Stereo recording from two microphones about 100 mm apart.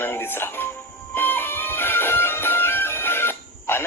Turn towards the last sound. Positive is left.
turn(degrees=25)  # may be behind; listen again after turning